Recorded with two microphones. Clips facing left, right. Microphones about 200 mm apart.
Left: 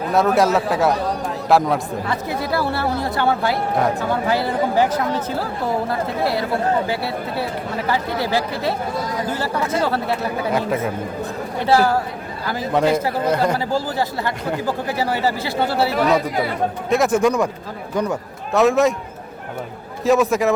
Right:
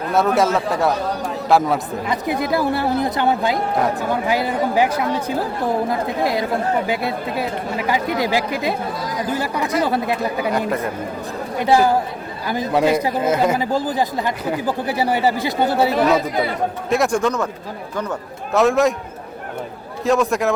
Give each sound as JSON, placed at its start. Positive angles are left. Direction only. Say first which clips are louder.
{"t": 0.0, "sound": "speech", "louder": "left 1 dB", "side_deg": 0}
{"t": 2.0, "sound": "a woman's voice", "louder": "right 4 dB", "side_deg": -15}
{"t": 10.7, "sound": "speech", "louder": "left 1 dB", "side_deg": 0}
{"t": 11.6, "sound": "a woman's voice", "louder": "right 1 dB", "side_deg": -15}
{"t": 13.7, "sound": "a woman's voice", "louder": "right 2 dB", "side_deg": -15}
{"t": 16.9, "sound": "speech", "louder": "left 2 dB", "side_deg": 5}
{"t": 18.5, "sound": "speech", "louder": "even", "side_deg": 0}
{"t": 20.1, "sound": "speech", "louder": "left 1 dB", "side_deg": 0}